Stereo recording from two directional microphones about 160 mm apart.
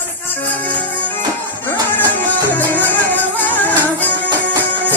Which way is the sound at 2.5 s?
10° left (ahead or behind).